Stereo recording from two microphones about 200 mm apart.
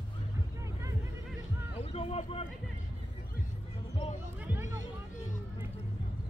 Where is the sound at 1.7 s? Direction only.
30° left (ahead or behind).